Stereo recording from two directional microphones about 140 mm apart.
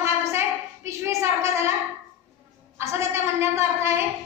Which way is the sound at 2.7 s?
20° right (ahead or behind).